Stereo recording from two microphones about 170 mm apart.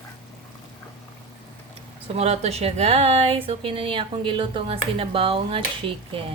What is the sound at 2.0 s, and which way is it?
A woman's voice, 35° right (ahead or behind).